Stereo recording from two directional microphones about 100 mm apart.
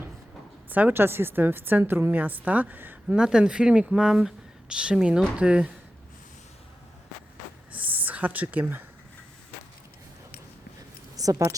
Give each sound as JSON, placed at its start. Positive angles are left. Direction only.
{"t": 0.7, "sound": "a woman's voice", "side_deg": -15}
{"t": 7.7, "sound": "a sound", "side_deg": -15}
{"t": 11.2, "sound": "speech", "side_deg": -35}